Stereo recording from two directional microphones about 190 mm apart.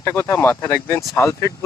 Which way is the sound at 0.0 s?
15° left (ahead or behind).